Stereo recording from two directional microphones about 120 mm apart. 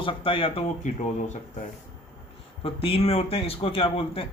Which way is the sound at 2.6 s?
50° left (ahead or behind).